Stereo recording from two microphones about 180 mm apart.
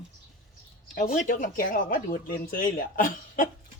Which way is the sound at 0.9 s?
50° left (ahead or behind).